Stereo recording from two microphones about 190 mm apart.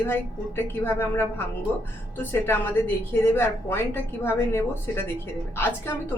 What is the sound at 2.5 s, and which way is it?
A woman's voice, 10° left (ahead or behind).